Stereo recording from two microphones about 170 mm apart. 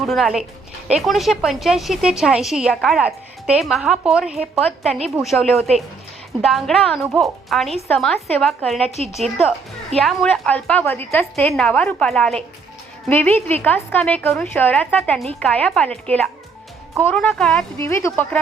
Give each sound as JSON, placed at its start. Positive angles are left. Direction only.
{"t": 0.0, "sound": "a woman's voice", "side_deg": 0}
{"t": 17.8, "sound": "a woman's voice", "side_deg": 15}